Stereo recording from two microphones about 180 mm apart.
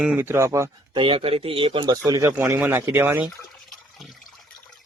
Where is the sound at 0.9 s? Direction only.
30° right (ahead or behind); by 3.3 s 10° right (ahead or behind).